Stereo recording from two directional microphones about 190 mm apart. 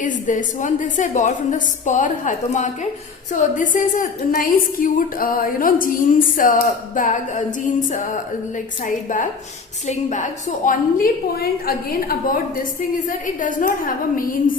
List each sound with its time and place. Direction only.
0.0 s a woman's voice: 45° left (ahead or behind)